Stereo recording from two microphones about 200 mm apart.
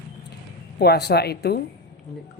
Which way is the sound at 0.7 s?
55° left (ahead or behind).